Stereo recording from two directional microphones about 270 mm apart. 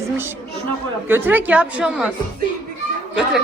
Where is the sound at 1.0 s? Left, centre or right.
Centre.